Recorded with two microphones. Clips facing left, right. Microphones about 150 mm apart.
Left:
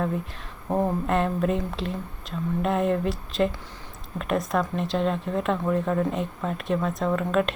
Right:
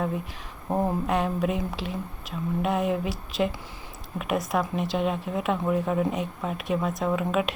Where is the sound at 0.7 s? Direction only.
Centre (ahead or behind).